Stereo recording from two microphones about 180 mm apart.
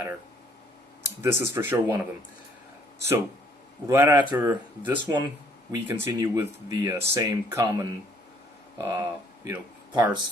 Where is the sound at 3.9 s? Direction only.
15° right (ahead or behind).